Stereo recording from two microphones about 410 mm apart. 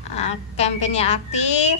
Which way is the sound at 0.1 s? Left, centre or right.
Centre.